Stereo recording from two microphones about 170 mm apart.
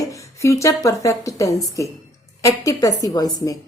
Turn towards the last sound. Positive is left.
turn(degrees=20)  # may be behind; listen again after turning